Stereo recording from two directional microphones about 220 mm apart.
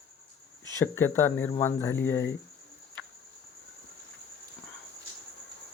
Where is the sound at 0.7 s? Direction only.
10° left (ahead or behind).